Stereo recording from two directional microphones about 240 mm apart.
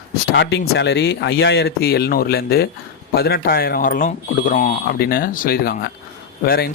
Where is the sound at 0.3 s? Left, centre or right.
Left.